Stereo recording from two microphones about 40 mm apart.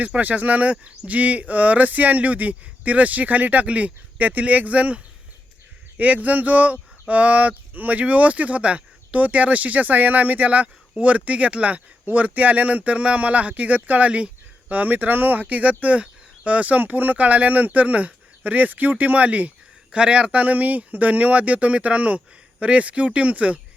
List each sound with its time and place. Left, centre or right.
0.2 s speech: right
6.0 s speech: right